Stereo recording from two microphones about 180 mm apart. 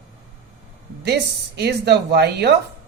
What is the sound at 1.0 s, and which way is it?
Speech, 65° right (ahead or behind).